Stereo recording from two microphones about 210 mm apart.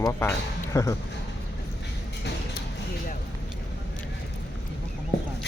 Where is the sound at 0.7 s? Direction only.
15° left (ahead or behind).